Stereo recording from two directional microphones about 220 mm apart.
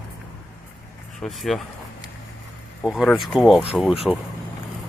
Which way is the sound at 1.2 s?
Centre (ahead or behind).